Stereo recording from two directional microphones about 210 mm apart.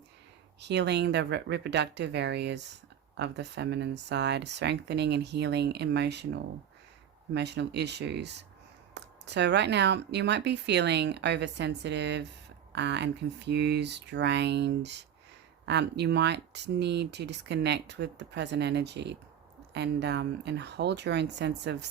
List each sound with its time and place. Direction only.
0.6 s speech: 55° right (ahead or behind)